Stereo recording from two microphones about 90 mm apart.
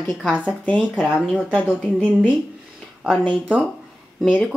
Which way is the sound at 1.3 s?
15° right (ahead or behind).